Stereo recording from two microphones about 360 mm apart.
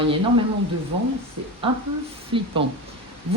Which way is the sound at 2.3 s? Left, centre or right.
Centre.